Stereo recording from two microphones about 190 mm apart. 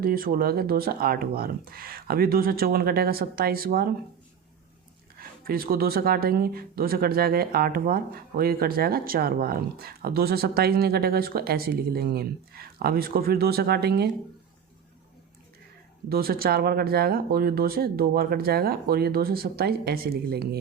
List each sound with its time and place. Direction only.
0.0 s speech: 50° right (ahead or behind)
5.5 s speech: 50° right (ahead or behind)
16.0 s speech: 55° right (ahead or behind)